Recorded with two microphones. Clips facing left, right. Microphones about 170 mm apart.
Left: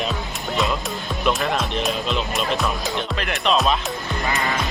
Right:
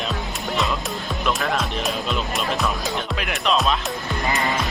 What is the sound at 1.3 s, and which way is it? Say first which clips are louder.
Speech: left 2 dB; centre (ahead or behind).